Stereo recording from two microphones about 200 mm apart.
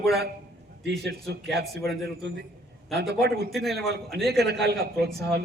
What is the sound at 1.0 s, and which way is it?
A man's voice, 55° right (ahead or behind).